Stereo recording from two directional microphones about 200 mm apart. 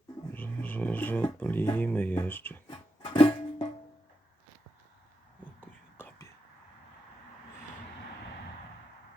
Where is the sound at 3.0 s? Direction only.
25° left (ahead or behind).